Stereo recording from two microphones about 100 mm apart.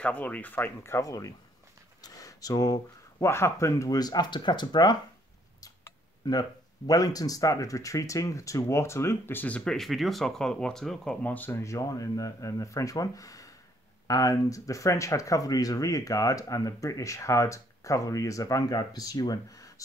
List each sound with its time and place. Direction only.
0.0 s speech: 15° left (ahead or behind); by 4.9 s 45° left (ahead or behind)
5.6 s tick-tock: 40° left (ahead or behind)
6.9 s speech: 40° left (ahead or behind); by 9.6 s 20° left (ahead or behind)
9.7 s speech: centre (ahead or behind)
11.2 s speech: 20° left (ahead or behind)
11.6 s speech: 35° left (ahead or behind)